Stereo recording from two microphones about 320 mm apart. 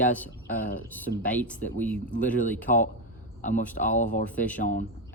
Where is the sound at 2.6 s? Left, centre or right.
Left.